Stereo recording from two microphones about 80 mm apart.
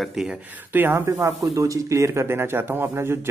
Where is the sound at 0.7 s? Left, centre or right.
Right.